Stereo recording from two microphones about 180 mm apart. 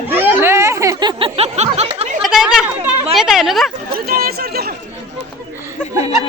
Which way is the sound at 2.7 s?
5° right (ahead or behind).